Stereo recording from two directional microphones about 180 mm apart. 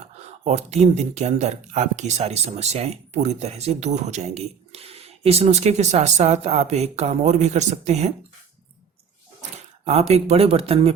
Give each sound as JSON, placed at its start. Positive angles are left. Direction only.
{"t": 0.4, "sound": "speech", "side_deg": -40}
{"t": 9.8, "sound": "speech", "side_deg": -35}